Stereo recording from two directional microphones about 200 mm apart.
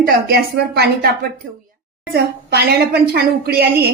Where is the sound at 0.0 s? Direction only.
50° right (ahead or behind).